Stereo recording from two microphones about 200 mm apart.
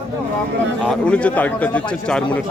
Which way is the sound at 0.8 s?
5° left (ahead or behind).